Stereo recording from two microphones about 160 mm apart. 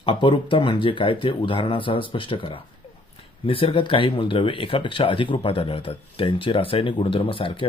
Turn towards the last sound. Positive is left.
turn(degrees=35)  # may be behind; listen again after turning